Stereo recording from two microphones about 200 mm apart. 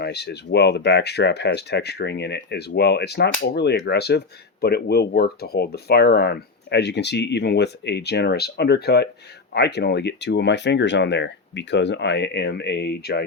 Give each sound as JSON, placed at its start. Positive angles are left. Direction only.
{"t": 0.0, "sound": "speech", "side_deg": 55}